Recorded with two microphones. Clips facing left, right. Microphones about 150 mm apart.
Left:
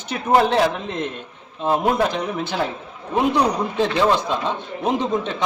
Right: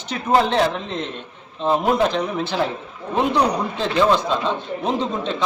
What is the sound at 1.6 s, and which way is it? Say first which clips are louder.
Speech: right 1 dB; 10° left (ahead or behind).